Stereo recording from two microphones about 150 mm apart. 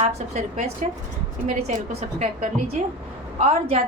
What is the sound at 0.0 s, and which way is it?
A woman's voice, 50° right (ahead or behind).